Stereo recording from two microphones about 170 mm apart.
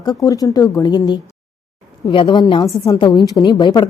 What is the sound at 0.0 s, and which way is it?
A woman's voice, 20° left (ahead or behind).